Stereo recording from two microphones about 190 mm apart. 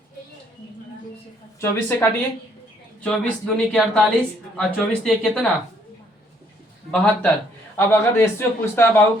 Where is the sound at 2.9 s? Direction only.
5° left (ahead or behind).